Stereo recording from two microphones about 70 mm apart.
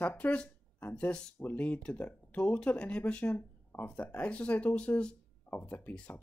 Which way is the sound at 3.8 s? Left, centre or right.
Centre.